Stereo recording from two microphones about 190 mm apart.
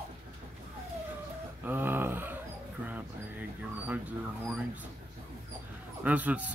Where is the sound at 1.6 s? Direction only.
10° right (ahead or behind).